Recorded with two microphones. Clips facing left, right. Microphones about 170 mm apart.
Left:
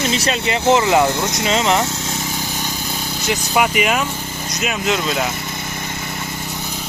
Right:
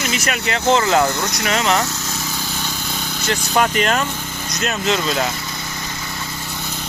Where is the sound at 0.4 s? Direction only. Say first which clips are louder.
Left 1 dB; 20° left (ahead or behind).